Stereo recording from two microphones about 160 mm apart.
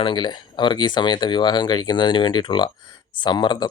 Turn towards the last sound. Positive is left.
turn(degrees=30)  # may be behind; listen again after turning